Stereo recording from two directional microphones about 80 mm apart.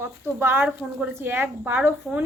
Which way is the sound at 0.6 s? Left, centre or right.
Centre.